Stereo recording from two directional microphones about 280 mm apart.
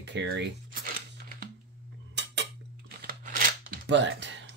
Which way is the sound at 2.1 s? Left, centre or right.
Right.